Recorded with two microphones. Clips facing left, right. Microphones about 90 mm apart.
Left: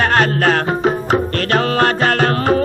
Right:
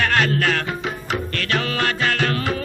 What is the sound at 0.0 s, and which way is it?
Music, 40° left (ahead or behind).